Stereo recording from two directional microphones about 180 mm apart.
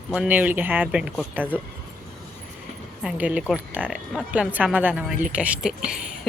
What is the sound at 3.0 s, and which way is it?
A woman's voice, 5° right (ahead or behind).